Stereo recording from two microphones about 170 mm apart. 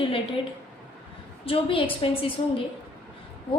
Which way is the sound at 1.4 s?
35° left (ahead or behind).